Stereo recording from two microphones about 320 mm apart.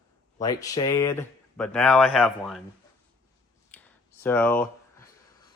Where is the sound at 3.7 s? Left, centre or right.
Centre.